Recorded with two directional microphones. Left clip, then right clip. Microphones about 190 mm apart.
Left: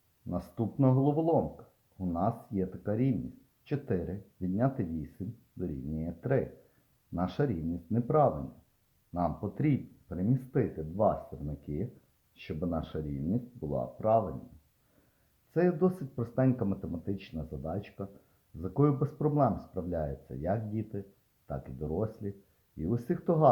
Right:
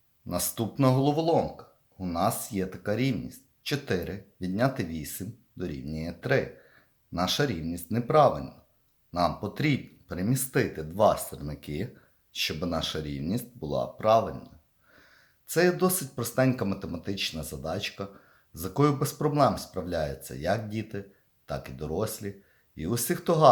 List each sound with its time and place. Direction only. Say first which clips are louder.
0.3 s speech: right 5 dB; 10° right (ahead or behind)
15.5 s speech: right 4 dB; centre (ahead or behind)
18.5 s speech: right 4 dB; 20° right (ahead or behind)
18.8 s speech: right 4 dB; 5° right (ahead or behind)